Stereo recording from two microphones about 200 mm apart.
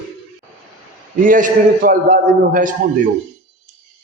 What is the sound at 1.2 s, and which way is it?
A man's voice, 40° right (ahead or behind).